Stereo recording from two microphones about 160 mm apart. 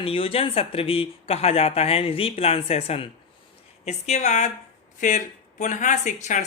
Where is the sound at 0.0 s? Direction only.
35° left (ahead or behind).